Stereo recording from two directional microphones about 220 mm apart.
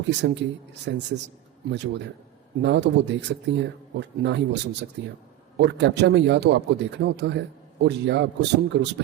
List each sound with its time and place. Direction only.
0.2 s a man's voice: 50° right (ahead or behind)